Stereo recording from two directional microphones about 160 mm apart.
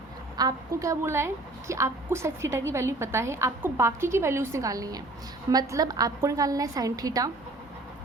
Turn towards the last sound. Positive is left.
turn(degrees=-20)  # may be behind; listen again after turning